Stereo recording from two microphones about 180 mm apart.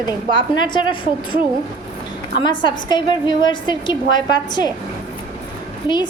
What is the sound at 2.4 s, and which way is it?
A woman's voice, 25° left (ahead or behind).